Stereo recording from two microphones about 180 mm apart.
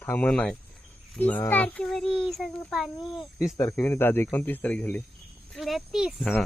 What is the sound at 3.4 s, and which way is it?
Speech, 15° left (ahead or behind).